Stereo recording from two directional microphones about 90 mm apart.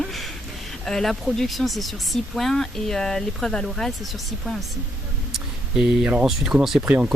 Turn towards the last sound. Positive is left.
turn(degrees=-15)  # may be behind; listen again after turning